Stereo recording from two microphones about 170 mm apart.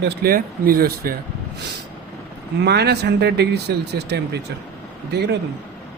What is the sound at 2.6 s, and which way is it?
Speech, 75° right (ahead or behind).